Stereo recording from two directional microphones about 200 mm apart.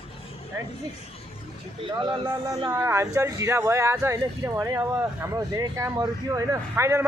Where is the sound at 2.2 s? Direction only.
15° right (ahead or behind).